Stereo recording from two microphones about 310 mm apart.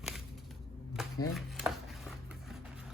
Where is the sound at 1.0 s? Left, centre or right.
Centre.